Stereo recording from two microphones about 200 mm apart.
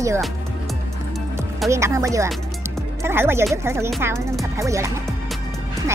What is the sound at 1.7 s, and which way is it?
Speech, 15° right (ahead or behind).